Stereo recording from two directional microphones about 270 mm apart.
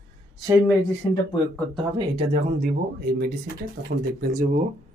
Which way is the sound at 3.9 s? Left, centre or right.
Right.